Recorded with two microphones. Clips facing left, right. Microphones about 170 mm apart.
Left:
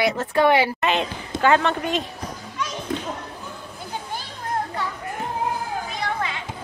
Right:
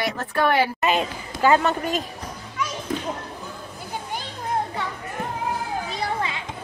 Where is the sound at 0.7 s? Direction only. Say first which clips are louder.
Even; 5° right (ahead or behind).